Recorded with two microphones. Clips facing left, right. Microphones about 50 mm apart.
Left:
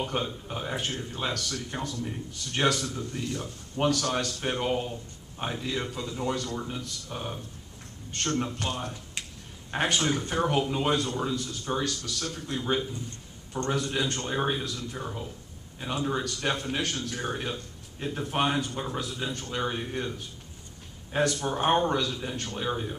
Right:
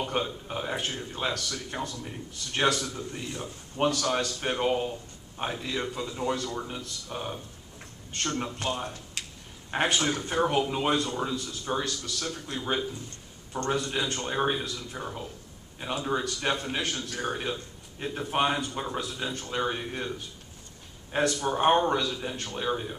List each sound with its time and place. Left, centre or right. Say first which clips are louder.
0.0 s speech: right 1 dB; centre
3.8 s a man's voice: even; centre
21.1 s speech: even; centre